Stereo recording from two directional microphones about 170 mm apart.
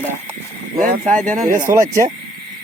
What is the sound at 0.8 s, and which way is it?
Speech, 50° right (ahead or behind).